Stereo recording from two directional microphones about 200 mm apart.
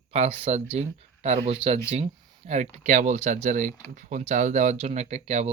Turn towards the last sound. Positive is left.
turn(degrees=-35)  # may be behind; listen again after turning